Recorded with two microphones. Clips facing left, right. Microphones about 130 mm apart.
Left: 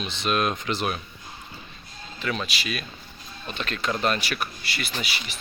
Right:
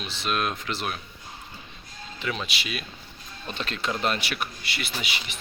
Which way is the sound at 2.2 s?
20° right (ahead or behind).